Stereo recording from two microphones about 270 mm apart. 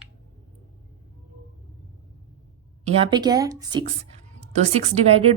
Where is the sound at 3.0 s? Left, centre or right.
Centre.